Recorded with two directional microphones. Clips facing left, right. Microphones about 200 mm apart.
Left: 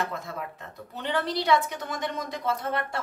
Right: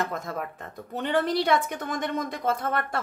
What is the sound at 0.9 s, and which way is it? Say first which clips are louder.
Speech: right 4 dB; 50° right (ahead or behind).